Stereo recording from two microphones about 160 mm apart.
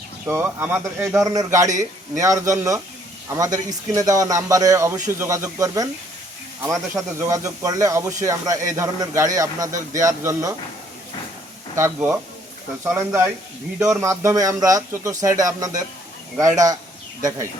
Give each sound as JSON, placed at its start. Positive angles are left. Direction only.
{"t": 0.3, "sound": "speech", "side_deg": -15}
{"t": 11.8, "sound": "speech", "side_deg": -10}